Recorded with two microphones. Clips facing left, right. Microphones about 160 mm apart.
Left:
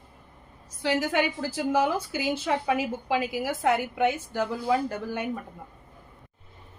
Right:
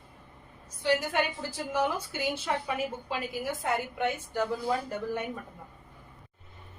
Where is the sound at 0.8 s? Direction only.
90° left.